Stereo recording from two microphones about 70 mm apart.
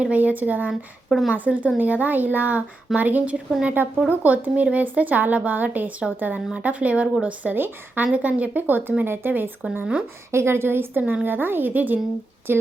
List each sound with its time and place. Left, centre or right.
0.0 s speech: right
0.7 s a woman's voice: centre
1.3 s a woman's voice: centre
11.0 s a woman's voice: right